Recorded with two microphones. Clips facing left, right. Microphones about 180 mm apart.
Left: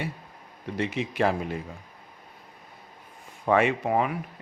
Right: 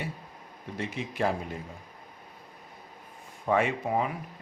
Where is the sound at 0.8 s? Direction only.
80° left.